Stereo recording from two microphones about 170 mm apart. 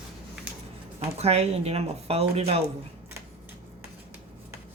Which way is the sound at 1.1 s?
40° right (ahead or behind).